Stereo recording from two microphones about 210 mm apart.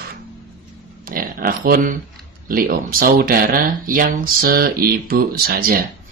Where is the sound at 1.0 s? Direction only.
40° right (ahead or behind).